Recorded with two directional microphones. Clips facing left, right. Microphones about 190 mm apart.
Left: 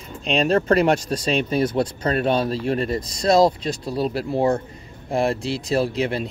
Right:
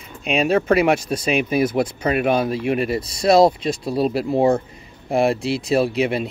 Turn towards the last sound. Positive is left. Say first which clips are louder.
# right 3 dB
turn(degrees=-10)  # may be behind; listen again after turning